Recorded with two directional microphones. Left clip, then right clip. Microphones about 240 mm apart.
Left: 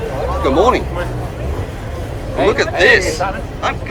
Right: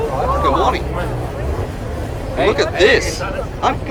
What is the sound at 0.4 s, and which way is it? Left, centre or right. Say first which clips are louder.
Speech: left 5 dB; centre.